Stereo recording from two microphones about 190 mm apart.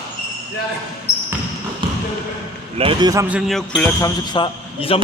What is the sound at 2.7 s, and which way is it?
Speech, 30° right (ahead or behind).